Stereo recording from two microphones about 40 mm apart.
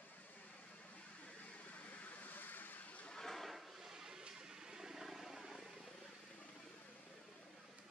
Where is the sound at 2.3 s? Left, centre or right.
Left.